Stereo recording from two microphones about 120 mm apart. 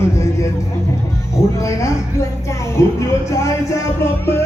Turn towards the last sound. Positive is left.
turn(degrees=20)  # may be behind; listen again after turning